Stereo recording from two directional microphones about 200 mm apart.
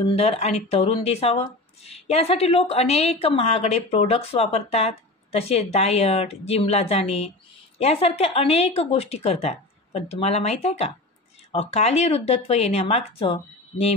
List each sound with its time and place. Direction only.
0.0 s speech: 30° left (ahead or behind)